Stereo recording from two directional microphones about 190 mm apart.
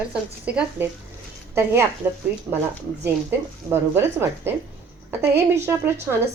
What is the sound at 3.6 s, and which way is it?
Speech, 10° right (ahead or behind).